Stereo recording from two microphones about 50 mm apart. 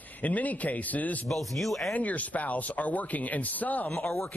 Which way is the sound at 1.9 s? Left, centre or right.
Left.